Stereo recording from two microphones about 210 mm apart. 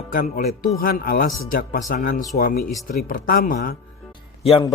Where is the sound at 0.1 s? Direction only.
40° left (ahead or behind).